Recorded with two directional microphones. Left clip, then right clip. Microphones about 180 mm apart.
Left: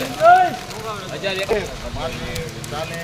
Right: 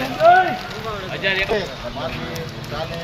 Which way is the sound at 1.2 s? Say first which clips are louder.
Right 4 dB; 45° left (ahead or behind).